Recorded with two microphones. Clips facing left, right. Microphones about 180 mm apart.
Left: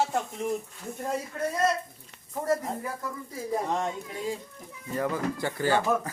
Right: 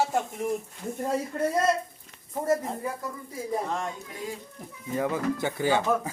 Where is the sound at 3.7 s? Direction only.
20° left (ahead or behind).